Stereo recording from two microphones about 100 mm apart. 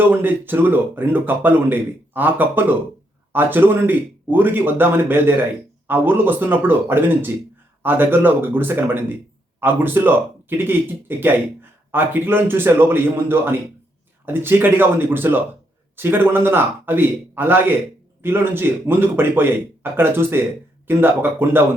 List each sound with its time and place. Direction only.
0.0 s speech: 20° right (ahead or behind)